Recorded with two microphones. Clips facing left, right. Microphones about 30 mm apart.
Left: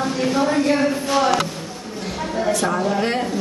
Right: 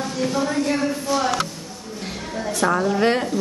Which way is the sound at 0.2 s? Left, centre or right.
Left.